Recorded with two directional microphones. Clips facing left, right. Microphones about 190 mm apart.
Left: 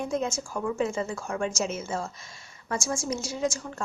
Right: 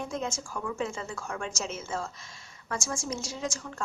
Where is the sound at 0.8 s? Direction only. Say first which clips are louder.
Left 5 dB; 15° left (ahead or behind).